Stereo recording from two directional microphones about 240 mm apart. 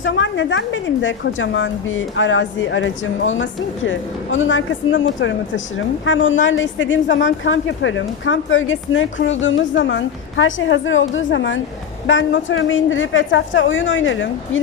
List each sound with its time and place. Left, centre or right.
0.0 s a woman's voice: left